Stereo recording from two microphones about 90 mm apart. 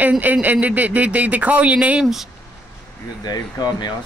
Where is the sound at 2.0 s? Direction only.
5° right (ahead or behind).